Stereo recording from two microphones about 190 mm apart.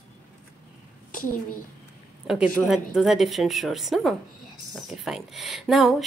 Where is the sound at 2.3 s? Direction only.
Centre (ahead or behind).